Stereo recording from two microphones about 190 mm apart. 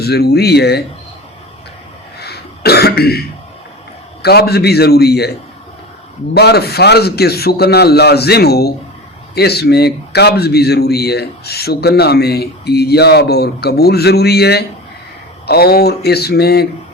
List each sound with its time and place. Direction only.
0.0 s a man's voice: 55° left (ahead or behind)
2.1 s throat clearing: 55° left (ahead or behind)
4.2 s a man's voice: 55° left (ahead or behind)
6.3 s a man's voice: 55° left (ahead or behind)